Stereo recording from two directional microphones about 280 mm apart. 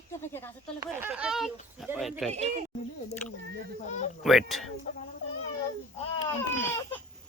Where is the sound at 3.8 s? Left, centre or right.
Left.